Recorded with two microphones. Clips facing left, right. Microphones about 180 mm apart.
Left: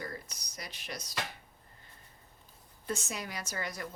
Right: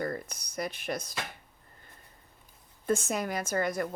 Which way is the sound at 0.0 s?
55° right (ahead or behind).